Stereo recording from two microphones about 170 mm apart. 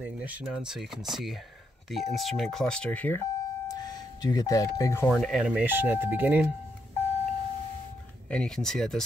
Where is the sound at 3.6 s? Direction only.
25° left (ahead or behind).